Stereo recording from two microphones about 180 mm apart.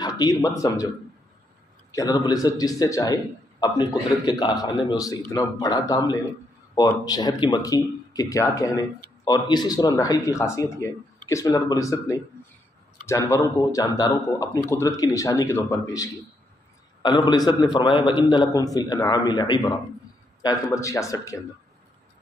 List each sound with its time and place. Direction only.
0.0 s a man's voice: 20° left (ahead or behind)